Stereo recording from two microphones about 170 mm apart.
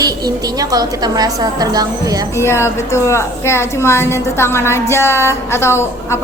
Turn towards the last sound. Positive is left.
turn(degrees=15)  # may be behind; listen again after turning